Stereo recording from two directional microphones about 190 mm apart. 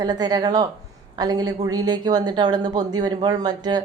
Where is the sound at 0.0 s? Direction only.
20° right (ahead or behind).